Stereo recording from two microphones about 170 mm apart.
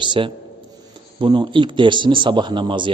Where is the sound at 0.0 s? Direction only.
30° right (ahead or behind).